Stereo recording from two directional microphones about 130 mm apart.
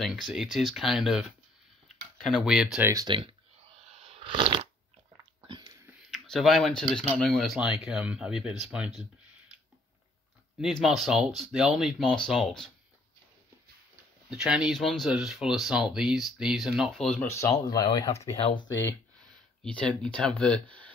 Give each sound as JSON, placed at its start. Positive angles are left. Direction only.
{"t": 0.0, "sound": "speech", "side_deg": -5}
{"t": 2.8, "sound": "speech", "side_deg": -25}
{"t": 3.8, "sound": "shuffling cards", "side_deg": -50}
{"t": 6.0, "sound": "speech", "side_deg": 5}
{"t": 10.6, "sound": "speech", "side_deg": 0}
{"t": 14.3, "sound": "speech", "side_deg": -5}
{"t": 17.3, "sound": "speech", "side_deg": 25}
{"t": 18.3, "sound": "speech", "side_deg": 45}
{"t": 18.7, "sound": "speech", "side_deg": 20}